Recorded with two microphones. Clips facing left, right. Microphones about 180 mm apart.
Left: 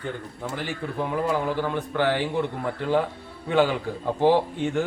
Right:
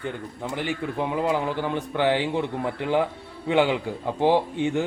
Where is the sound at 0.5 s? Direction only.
15° right (ahead or behind).